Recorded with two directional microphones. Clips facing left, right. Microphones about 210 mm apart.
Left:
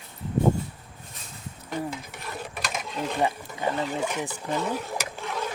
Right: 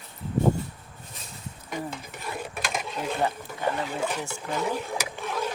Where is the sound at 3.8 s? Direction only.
10° right (ahead or behind).